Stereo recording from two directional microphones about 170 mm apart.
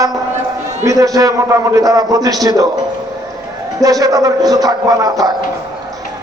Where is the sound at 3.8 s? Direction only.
20° right (ahead or behind).